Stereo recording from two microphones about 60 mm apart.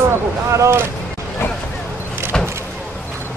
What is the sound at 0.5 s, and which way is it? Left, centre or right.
Speech, right.